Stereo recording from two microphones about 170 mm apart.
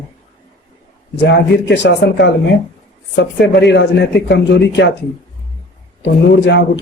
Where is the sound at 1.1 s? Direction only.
90° left.